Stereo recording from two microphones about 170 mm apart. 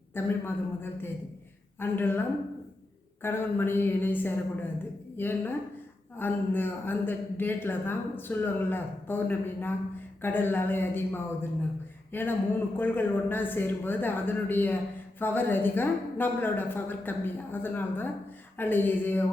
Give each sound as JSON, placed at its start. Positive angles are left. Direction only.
{"t": 0.1, "sound": "speech", "side_deg": 15}